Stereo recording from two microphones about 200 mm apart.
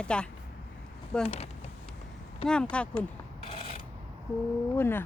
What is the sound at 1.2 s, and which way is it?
Speech, 30° left (ahead or behind).